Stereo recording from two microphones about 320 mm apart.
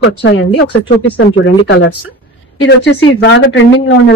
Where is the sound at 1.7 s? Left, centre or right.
Left.